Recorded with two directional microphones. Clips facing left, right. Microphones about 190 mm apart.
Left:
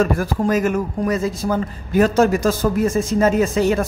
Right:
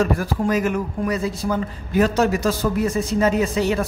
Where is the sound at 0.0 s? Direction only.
45° left (ahead or behind).